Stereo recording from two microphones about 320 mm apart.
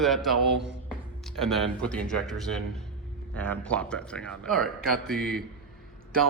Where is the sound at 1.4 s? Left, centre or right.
Centre.